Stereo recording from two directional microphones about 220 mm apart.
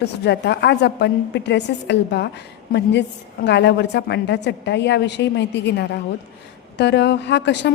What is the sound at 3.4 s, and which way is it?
A woman's voice, 50° left (ahead or behind).